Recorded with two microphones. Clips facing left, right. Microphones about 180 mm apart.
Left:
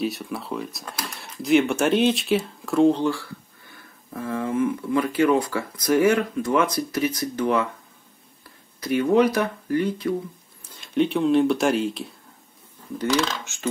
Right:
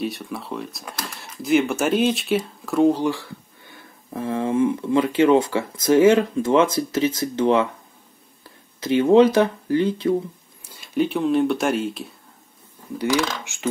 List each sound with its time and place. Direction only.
0.0 s speech: centre (ahead or behind)
4.1 s speech: 25° right (ahead or behind)
8.7 s speech: 25° right (ahead or behind)
10.6 s speech: 5° right (ahead or behind)
12.9 s speech: 10° right (ahead or behind)